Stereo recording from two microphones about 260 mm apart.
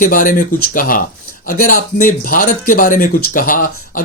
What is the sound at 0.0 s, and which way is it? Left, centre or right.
Speech, left.